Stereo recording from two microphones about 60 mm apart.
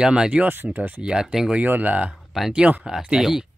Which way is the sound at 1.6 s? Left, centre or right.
Right.